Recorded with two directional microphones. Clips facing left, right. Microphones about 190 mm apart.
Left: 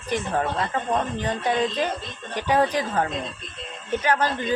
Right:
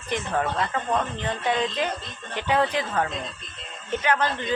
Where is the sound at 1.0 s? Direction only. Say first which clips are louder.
Left 2 dB; 15° left (ahead or behind).